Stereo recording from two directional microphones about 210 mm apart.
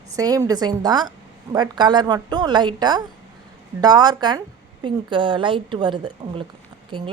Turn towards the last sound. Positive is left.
turn(degrees=-25)  # may be behind; listen again after turning